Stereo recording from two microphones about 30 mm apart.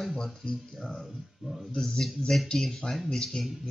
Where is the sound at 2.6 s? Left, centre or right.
Centre.